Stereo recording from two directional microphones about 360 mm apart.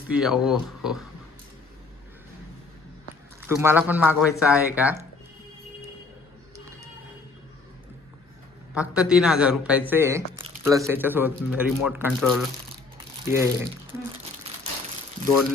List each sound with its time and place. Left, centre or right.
0.1 s speech: centre
3.4 s speech: centre
8.7 s speech: centre
14.2 s crumpling: centre